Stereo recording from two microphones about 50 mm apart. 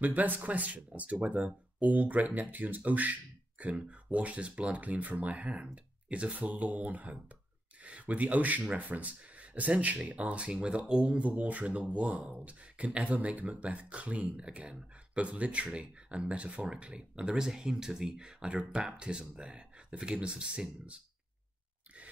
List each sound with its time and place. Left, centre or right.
0.0 s speech: right